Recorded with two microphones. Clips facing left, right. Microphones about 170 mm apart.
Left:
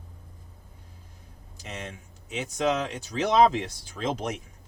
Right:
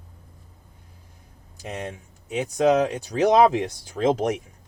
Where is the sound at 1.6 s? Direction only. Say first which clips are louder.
Right 6 dB; 50° right (ahead or behind).